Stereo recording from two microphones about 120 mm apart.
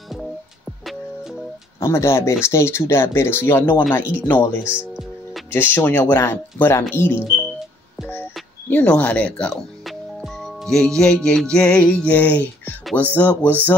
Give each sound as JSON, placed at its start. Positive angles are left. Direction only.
{"t": 0.1, "sound": "music", "side_deg": 0}
{"t": 1.8, "sound": "speech", "side_deg": 20}
{"t": 4.6, "sound": "speech", "side_deg": -10}
{"t": 5.5, "sound": "speech", "side_deg": 20}
{"t": 8.6, "sound": "speech", "side_deg": 15}
{"t": 9.8, "sound": "music", "side_deg": 0}
{"t": 12.9, "sound": "speech", "side_deg": 15}